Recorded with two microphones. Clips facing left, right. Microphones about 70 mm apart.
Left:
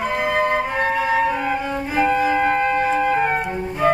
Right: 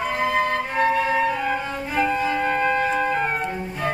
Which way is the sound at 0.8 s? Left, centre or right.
Centre.